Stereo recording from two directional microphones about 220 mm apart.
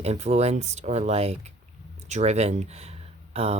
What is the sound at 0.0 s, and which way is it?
Speech, 30° right (ahead or behind).